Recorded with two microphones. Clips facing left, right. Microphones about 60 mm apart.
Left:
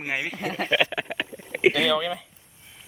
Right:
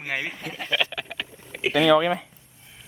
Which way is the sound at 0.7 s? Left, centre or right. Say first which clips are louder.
Left 2 dB; left.